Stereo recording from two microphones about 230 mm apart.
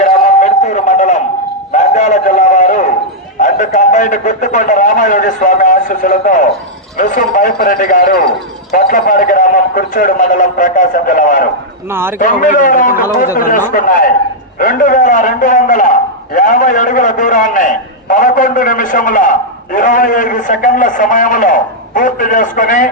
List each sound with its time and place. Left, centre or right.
0.0 s a sound: left
3.4 s a man's voice: left
11.9 s a man's voice: centre
12.2 s a man's voice: left